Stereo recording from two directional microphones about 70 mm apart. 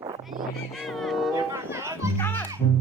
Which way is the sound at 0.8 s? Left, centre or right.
Centre.